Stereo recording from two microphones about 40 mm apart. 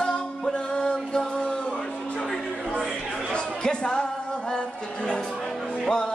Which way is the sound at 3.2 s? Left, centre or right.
Left.